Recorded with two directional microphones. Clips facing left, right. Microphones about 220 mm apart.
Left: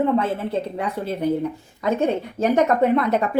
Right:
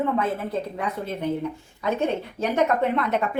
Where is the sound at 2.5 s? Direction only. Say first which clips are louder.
Left 4 dB; 40° left (ahead or behind).